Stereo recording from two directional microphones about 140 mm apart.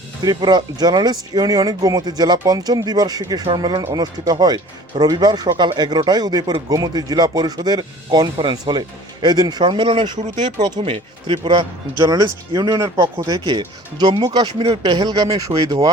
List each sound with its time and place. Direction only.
0.2 s speech: 30° right (ahead or behind)
10.2 s speech: 60° right (ahead or behind)
11.3 s speech: 35° right (ahead or behind)